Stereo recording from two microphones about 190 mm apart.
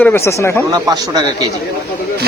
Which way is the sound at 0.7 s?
20° right (ahead or behind).